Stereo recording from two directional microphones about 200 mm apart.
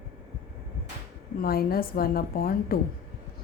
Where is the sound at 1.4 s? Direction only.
50° left (ahead or behind).